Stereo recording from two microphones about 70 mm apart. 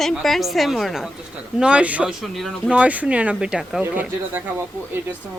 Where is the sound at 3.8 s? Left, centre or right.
Right.